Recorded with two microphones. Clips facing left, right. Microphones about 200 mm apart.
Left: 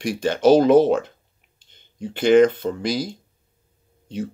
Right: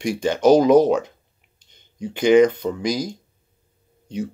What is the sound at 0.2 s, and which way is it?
Speech, 15° right (ahead or behind).